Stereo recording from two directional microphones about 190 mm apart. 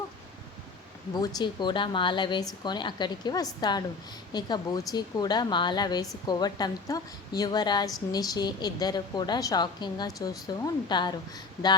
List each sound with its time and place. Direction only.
1.1 s a woman's voice: 20° left (ahead or behind)